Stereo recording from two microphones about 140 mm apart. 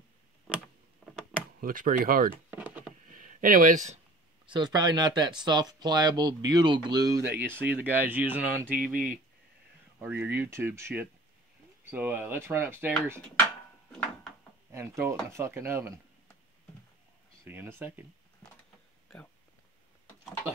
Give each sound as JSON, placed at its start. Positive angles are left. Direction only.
{"t": 1.6, "sound": "speech", "side_deg": -85}
{"t": 2.5, "sound": "a sound", "side_deg": -10}
{"t": 3.1, "sound": "a sound", "side_deg": -65}
{"t": 4.5, "sound": "speech", "side_deg": -30}
{"t": 7.3, "sound": "speech", "side_deg": -15}
{"t": 8.7, "sound": "speech", "side_deg": -90}
{"t": 9.9, "sound": "speech", "side_deg": -15}
{"t": 14.7, "sound": "speech", "side_deg": -20}
{"t": 17.5, "sound": "speech", "side_deg": -15}